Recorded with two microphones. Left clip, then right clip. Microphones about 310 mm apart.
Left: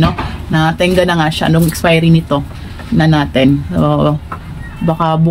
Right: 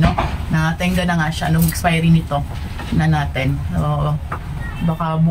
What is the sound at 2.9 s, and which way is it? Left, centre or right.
Speech, left.